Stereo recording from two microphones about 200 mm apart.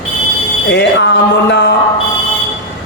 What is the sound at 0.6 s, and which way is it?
Speech, 60° left (ahead or behind).